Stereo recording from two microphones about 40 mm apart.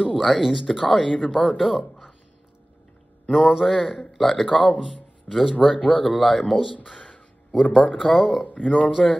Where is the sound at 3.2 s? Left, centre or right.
Centre.